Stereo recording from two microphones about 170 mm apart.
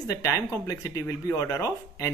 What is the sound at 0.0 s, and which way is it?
Speech, 20° left (ahead or behind).